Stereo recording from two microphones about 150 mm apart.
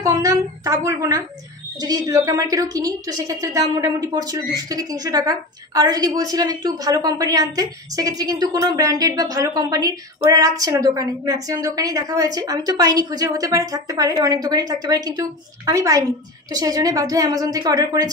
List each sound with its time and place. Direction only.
0.0 s a woman's voice: 20° right (ahead or behind)